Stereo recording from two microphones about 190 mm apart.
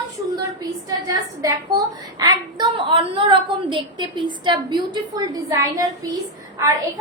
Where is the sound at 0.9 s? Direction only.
20° right (ahead or behind).